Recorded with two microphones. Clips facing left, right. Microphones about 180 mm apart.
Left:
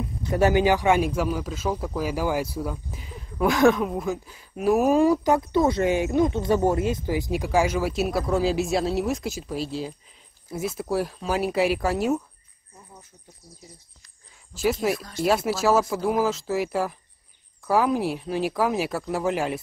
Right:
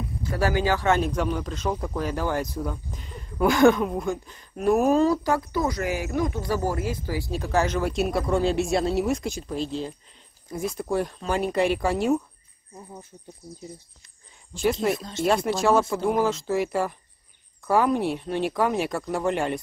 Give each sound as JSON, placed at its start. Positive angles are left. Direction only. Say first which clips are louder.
{"t": 0.2, "sound": "speech", "louder": "left 5 dB", "side_deg": 20}
{"t": 14.5, "sound": "speech", "louder": "even", "side_deg": 5}
{"t": 15.0, "sound": "speech", "louder": "even", "side_deg": -25}
{"t": 15.2, "sound": "speech", "louder": "even", "side_deg": 5}